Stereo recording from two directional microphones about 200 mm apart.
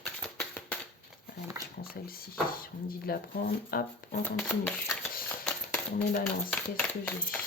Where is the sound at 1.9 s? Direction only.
45° left (ahead or behind).